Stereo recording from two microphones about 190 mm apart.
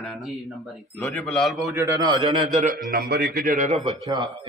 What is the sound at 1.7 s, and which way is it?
Speech, 20° right (ahead or behind).